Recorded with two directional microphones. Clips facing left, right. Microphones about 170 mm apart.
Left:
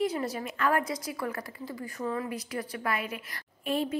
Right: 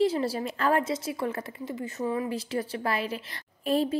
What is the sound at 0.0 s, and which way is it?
A woman's voice, 30° right (ahead or behind).